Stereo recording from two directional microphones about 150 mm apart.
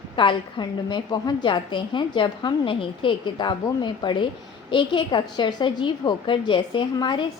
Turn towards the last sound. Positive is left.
turn(degrees=30)  # may be behind; listen again after turning